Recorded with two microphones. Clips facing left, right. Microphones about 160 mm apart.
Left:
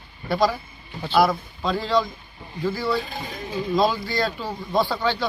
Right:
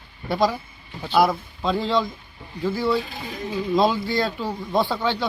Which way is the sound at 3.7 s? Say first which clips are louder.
Right 2 dB; 20° right (ahead or behind).